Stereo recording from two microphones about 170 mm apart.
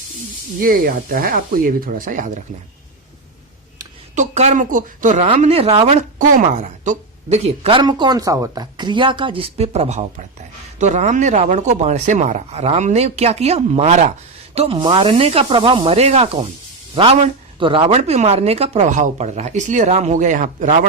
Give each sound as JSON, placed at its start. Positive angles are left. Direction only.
{"t": 0.6, "sound": "speech", "side_deg": -55}
{"t": 4.1, "sound": "a woman's voice", "side_deg": -45}